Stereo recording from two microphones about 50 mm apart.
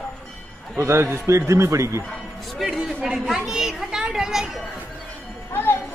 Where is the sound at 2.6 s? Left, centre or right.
Centre.